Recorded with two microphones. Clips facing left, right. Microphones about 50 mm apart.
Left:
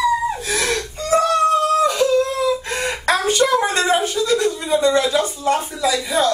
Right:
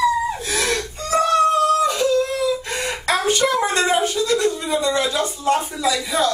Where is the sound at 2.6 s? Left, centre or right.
Left.